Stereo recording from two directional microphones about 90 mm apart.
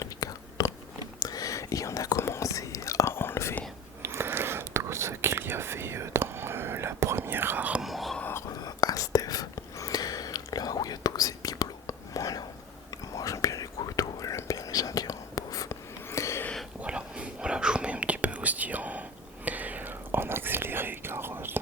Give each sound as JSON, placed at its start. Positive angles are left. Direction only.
{"t": 0.0, "sound": "biting", "side_deg": 40}
{"t": 1.2, "sound": "whispering", "side_deg": 40}
{"t": 4.0, "sound": "whispering", "side_deg": -25}
{"t": 7.8, "sound": "whispering", "side_deg": 0}
{"t": 8.2, "sound": "whispering", "side_deg": 25}
{"t": 8.6, "sound": "whispering", "side_deg": 45}
{"t": 16.0, "sound": "a sound", "side_deg": 30}
{"t": 16.8, "sound": "whispering", "side_deg": -10}